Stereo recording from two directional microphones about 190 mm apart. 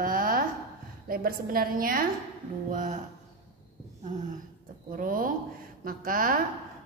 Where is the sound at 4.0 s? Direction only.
40° right (ahead or behind).